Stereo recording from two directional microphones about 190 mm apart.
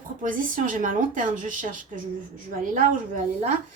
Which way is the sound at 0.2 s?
45° right (ahead or behind).